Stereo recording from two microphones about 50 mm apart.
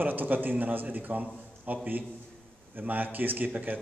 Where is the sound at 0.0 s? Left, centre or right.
Right.